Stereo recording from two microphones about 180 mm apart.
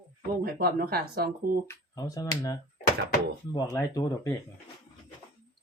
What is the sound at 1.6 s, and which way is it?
Speech, 15° left (ahead or behind).